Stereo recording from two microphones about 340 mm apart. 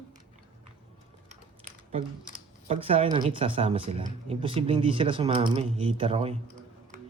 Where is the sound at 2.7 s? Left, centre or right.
Centre.